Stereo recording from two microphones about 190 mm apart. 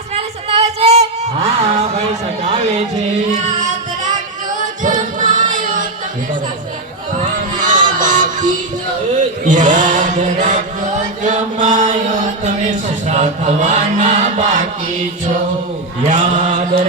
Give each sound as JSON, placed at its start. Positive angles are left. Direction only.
{"t": 0.1, "sound": "a sound", "side_deg": -30}
{"t": 4.8, "sound": "choir", "side_deg": -40}
{"t": 7.6, "sound": "music", "side_deg": -45}
{"t": 9.1, "sound": "chant", "side_deg": -40}
{"t": 16.2, "sound": "mantra", "side_deg": -40}